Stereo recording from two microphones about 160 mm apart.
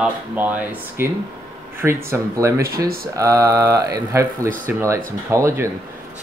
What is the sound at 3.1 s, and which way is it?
Mantra, 20° right (ahead or behind).